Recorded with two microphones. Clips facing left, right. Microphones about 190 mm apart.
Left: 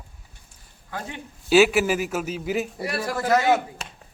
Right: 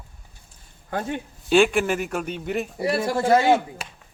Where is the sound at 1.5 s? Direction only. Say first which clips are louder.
Left 1 dB; 5° left (ahead or behind).